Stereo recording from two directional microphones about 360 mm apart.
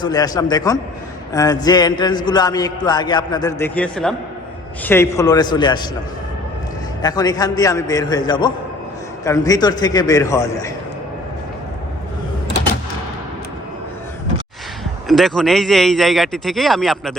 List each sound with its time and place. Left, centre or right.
0.0 s a man's voice: centre
7.0 s a man's voice: centre
15.0 s a man's voice: centre